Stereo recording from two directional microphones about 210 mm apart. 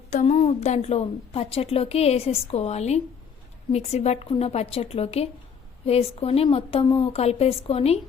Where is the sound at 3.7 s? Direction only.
30° left (ahead or behind).